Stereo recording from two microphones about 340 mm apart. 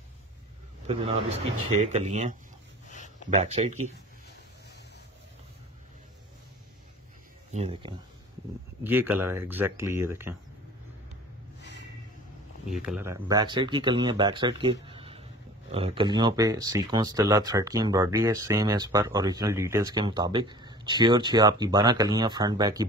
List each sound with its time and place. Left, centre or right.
0.8 s speech: centre
7.5 s speech: centre
8.8 s speech: centre
12.6 s speech: centre